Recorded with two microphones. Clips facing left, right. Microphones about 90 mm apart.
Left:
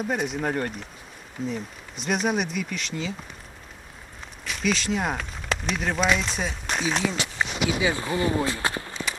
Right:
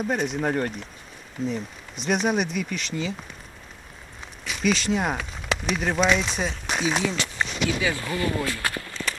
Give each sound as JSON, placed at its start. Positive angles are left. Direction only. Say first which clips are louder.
{"t": 0.0, "sound": "speech", "louder": "right 1 dB", "side_deg": 0}
{"t": 4.4, "sound": "speech", "louder": "right 2 dB", "side_deg": 0}
{"t": 7.8, "sound": "speech", "louder": "left 2 dB", "side_deg": 25}